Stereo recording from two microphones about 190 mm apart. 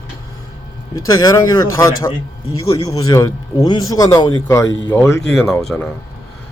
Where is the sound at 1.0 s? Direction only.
15° left (ahead or behind).